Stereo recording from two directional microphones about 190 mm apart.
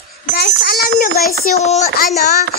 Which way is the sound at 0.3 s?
60° left (ahead or behind).